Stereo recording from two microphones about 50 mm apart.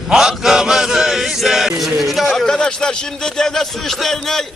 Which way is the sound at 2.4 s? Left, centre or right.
Centre.